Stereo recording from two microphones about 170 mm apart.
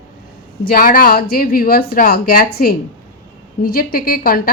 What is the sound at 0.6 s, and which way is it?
Speech, 55° left (ahead or behind).